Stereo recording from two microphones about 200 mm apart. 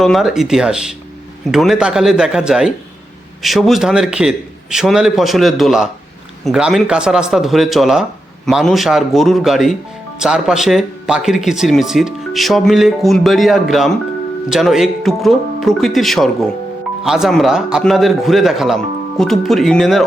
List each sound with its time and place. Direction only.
0.0 s speech: centre (ahead or behind)